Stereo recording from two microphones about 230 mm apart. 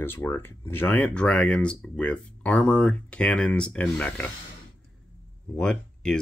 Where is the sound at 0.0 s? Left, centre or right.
Centre.